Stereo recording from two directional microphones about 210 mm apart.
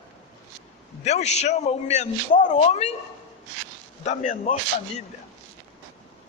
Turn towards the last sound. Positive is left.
turn(degrees=30)  # may be behind; listen again after turning